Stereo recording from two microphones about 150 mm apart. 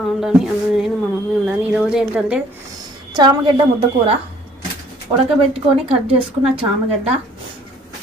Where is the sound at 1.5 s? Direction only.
5° right (ahead or behind).